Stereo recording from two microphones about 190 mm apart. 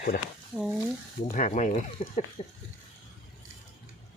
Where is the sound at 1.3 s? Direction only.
40° left (ahead or behind).